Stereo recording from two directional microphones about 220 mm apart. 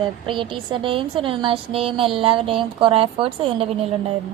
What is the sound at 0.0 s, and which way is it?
A woman's voice, 20° right (ahead or behind).